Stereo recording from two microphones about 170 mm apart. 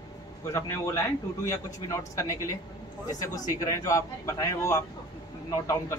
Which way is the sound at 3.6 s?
20° left (ahead or behind).